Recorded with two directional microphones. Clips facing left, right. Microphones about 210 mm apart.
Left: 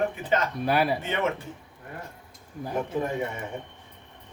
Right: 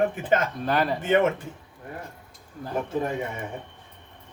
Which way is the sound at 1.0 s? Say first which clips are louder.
Right 7 dB; 50° right (ahead or behind).